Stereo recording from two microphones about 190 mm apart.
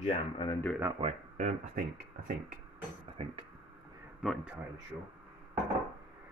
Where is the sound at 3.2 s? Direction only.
30° right (ahead or behind).